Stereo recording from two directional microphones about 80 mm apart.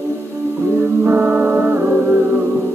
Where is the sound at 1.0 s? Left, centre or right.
Right.